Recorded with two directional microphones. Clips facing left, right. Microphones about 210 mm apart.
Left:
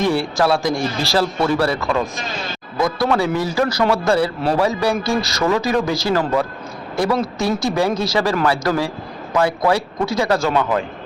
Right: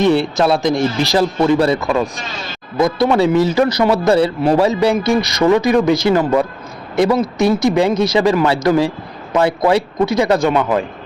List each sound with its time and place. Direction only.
0.0 s speech: 20° right (ahead or behind)